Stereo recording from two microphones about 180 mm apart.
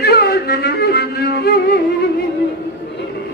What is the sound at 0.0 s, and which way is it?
Music, 60° left (ahead or behind).